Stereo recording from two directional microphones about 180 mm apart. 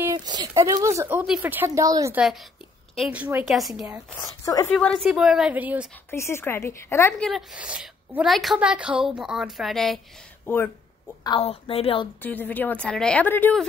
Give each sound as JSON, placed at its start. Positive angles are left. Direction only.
{"t": 0.0, "sound": "speech", "side_deg": -20}
{"t": 3.0, "sound": "a woman's voice", "side_deg": -5}
{"t": 4.2, "sound": "a woman's voice", "side_deg": 20}
{"t": 4.7, "sound": "a woman's voice", "side_deg": 5}
{"t": 6.0, "sound": "speech", "side_deg": 15}
{"t": 7.2, "sound": "a woman's voice", "side_deg": -5}
{"t": 10.4, "sound": "speech", "side_deg": 10}
{"t": 11.2, "sound": "a woman's voice", "side_deg": 30}
{"t": 12.2, "sound": "speech", "side_deg": 10}